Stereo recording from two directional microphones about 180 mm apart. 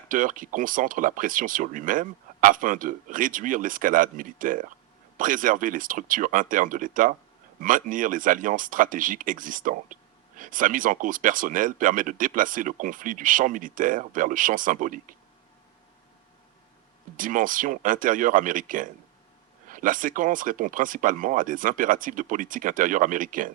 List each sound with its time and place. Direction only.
0.1 s speech: 50° right (ahead or behind)
17.2 s speech: 50° right (ahead or behind)